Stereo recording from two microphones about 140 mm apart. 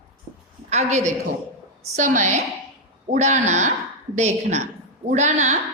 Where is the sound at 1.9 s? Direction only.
60° right (ahead or behind).